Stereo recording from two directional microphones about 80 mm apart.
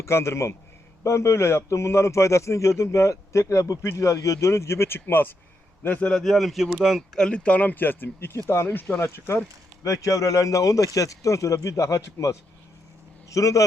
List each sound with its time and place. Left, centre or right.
0.0 s a man's voice: left
6.1 s speech: centre
7.2 s a man's voice: centre; by 9.4 s left
9.8 s speech: left